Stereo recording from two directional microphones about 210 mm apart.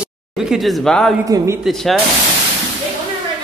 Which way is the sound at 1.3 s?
15° right (ahead or behind).